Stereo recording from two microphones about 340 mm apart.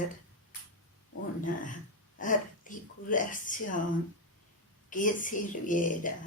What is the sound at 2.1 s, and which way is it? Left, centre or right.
Speech, left.